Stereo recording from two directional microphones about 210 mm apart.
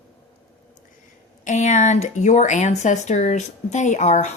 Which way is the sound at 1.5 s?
35° left (ahead or behind).